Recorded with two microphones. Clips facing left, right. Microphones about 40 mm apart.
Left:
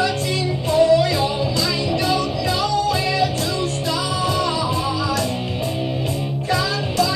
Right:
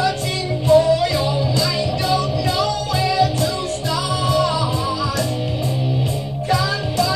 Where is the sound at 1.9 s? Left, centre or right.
Left.